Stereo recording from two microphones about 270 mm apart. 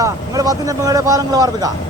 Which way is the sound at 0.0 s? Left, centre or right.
Centre.